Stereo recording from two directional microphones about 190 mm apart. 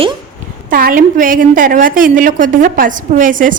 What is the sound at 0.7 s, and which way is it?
A woman's voice, 45° right (ahead or behind).